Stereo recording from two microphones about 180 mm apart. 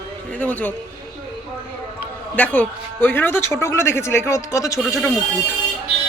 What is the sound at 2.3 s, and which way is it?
Speech, 10° left (ahead or behind).